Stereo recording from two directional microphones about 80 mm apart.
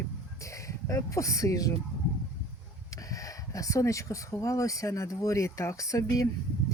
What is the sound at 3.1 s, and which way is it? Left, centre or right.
Speech, left.